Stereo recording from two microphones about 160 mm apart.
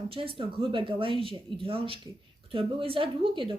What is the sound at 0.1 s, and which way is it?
Speech, 35° right (ahead or behind).